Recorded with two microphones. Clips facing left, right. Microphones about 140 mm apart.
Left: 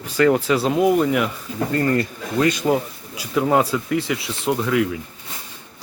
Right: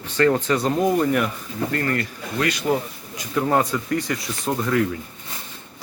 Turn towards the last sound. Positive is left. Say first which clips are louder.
# left 2 dB
turn(degrees=5)  # may be behind; listen again after turning